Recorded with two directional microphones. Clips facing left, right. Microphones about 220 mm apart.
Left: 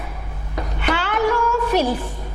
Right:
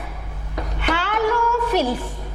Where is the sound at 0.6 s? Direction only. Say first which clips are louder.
Left 1 dB; 10° left (ahead or behind).